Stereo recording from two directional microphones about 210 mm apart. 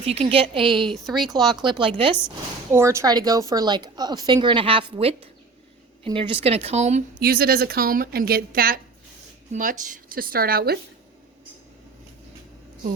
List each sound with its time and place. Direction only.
0.0 s a woman's voice: 30° right (ahead or behind)
0.9 s speech: centre (ahead or behind)
1.6 s a woman's voice: 25° right (ahead or behind)
2.7 s a woman's voice: 15° right (ahead or behind); by 7.0 s 30° right (ahead or behind)
7.2 s a woman's voice: 45° right (ahead or behind)